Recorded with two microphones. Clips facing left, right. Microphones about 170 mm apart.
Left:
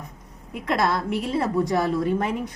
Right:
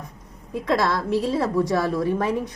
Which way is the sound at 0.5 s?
20° left (ahead or behind).